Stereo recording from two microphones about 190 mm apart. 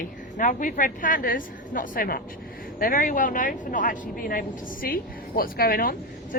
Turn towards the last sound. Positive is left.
turn(degrees=50)  # may be behind; listen again after turning